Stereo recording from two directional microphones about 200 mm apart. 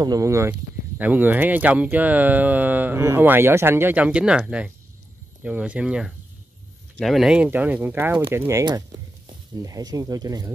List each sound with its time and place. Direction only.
0.0 s speech: 15° right (ahead or behind)